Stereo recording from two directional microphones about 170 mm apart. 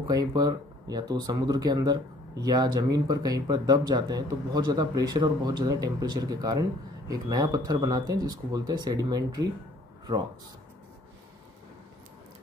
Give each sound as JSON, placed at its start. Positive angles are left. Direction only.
{"t": 0.0, "sound": "speech", "side_deg": -20}